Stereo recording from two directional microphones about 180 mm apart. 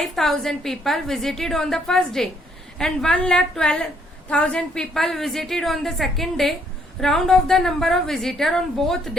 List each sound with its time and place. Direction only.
0.0 s a woman's voice: centre (ahead or behind)